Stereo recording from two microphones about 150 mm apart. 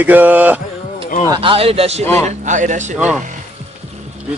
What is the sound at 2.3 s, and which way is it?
Speech, 55° right (ahead or behind).